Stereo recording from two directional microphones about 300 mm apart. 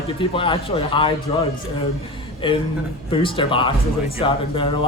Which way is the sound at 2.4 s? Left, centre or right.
Centre.